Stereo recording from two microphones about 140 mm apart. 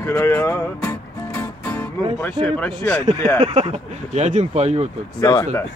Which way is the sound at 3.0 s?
55° right (ahead or behind).